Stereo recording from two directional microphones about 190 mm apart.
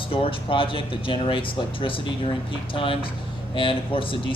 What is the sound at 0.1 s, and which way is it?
Speech, 30° left (ahead or behind).